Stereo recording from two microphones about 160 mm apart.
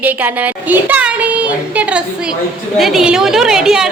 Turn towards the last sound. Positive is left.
turn(degrees=-5)  # may be behind; listen again after turning